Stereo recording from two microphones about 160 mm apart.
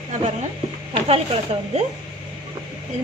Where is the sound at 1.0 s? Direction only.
40° right (ahead or behind).